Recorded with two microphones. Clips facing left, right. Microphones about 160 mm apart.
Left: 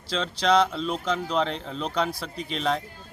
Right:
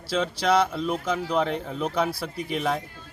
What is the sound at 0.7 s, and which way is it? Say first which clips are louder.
A man's voice: right 1 dB; 15° right (ahead or behind).